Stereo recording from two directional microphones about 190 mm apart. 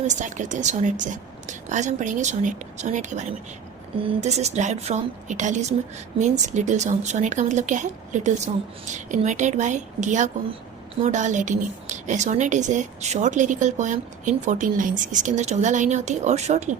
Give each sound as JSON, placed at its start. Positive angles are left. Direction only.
{"t": 0.1, "sound": "a woman's voice", "side_deg": -40}